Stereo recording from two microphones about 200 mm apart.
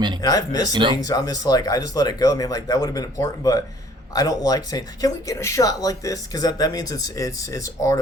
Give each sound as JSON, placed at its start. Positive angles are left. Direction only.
{"t": 0.2, "sound": "speech", "side_deg": 20}
{"t": 0.7, "sound": "speech", "side_deg": -25}
{"t": 1.0, "sound": "speech", "side_deg": 20}